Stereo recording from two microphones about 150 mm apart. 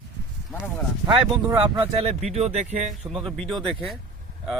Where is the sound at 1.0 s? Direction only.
30° right (ahead or behind); by 3.1 s 50° right (ahead or behind).